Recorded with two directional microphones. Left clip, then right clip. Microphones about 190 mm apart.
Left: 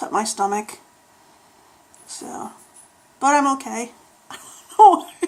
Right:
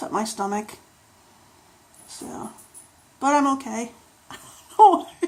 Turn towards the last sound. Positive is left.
turn(degrees=10)  # may be behind; listen again after turning